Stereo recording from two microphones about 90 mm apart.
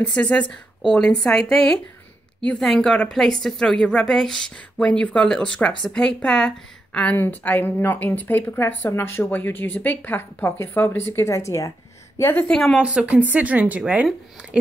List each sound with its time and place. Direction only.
0.0 s a woman's voice: 10° left (ahead or behind)
12.4 s speech: 5° left (ahead or behind)
12.8 s speech: 15° right (ahead or behind)